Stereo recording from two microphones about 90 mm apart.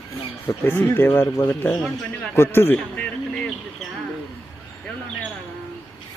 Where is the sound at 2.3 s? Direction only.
25° left (ahead or behind).